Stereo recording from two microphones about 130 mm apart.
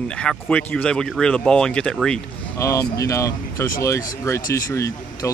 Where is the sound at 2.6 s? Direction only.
25° left (ahead or behind).